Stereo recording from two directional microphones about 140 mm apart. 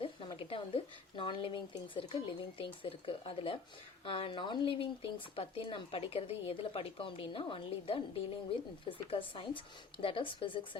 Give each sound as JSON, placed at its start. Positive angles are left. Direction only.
{"t": 0.0, "sound": "speech", "side_deg": 40}